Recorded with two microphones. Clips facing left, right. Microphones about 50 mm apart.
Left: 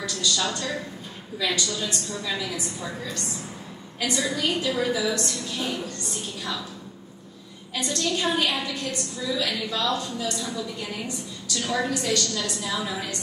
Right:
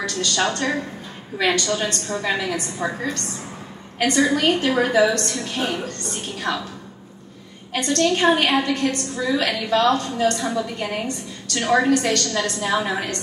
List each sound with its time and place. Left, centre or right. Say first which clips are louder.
0.0 s a woman's voice: right 5 dB; right
7.7 s a woman's voice: right 7 dB; right